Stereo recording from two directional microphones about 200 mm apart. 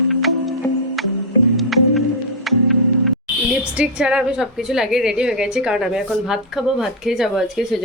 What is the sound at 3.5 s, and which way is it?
A woman's voice, 5° right (ahead or behind).